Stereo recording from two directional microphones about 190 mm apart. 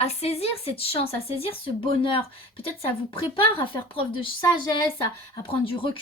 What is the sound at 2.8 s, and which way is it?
Speech, 30° left (ahead or behind).